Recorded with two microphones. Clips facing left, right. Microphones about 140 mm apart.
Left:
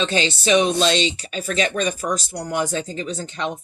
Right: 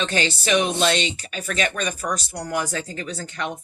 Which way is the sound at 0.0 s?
20° left (ahead or behind).